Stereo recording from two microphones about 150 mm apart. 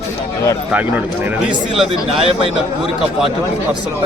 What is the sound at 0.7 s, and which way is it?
Speech, 10° right (ahead or behind).